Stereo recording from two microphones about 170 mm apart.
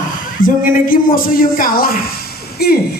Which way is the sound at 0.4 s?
55° left (ahead or behind).